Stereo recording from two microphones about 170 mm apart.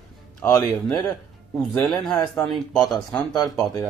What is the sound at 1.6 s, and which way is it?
Speech, centre (ahead or behind).